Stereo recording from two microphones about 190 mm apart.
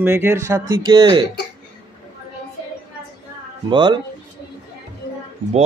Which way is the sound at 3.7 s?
25° right (ahead or behind).